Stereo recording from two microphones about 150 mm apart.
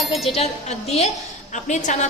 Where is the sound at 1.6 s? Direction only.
55° left (ahead or behind).